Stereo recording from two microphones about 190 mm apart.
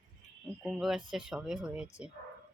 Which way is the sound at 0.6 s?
Centre (ahead or behind).